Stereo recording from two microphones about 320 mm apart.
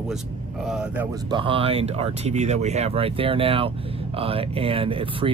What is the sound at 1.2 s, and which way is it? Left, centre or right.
Speech, centre.